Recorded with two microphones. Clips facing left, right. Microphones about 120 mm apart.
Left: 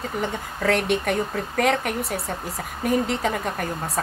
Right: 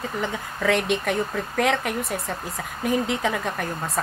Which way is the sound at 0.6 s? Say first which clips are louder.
Left 1 dB; 45° left (ahead or behind).